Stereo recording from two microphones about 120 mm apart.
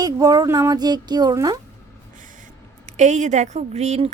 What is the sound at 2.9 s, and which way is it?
A woman's voice, 80° right.